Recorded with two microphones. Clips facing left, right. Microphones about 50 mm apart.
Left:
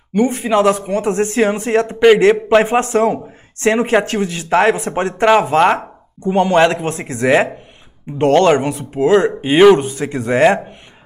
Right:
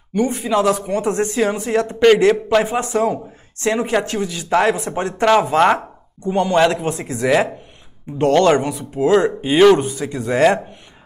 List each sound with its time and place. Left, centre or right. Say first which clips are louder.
0.1 s speech: left 3 dB; left
0.7 s speech: left 3 dB; centre
1.2 s speech: left 3 dB; left
2.8 s speech: left 4 dB; left
4.7 s speech: left 3 dB; left
5.2 s speech: left 2 dB; left
9.8 s speech: left 3 dB; left